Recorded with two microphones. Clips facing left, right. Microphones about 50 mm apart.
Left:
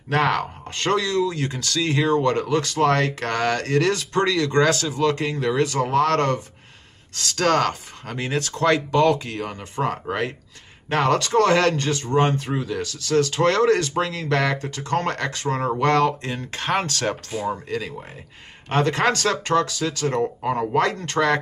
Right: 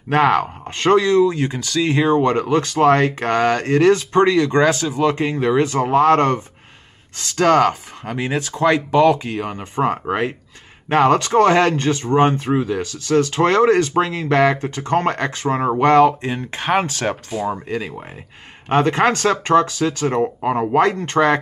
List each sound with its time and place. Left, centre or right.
0.1 s speech: right